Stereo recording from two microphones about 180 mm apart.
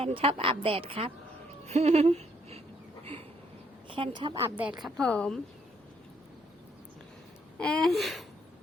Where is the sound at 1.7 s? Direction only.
35° right (ahead or behind).